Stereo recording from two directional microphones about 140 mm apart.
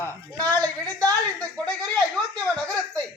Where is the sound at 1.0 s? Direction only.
25° right (ahead or behind).